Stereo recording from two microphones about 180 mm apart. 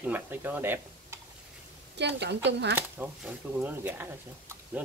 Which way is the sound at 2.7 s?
10° right (ahead or behind).